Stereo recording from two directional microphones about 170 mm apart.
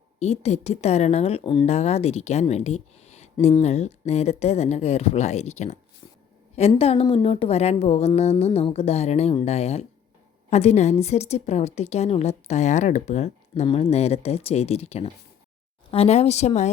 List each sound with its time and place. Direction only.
0.2 s a woman's voice: 40° left (ahead or behind)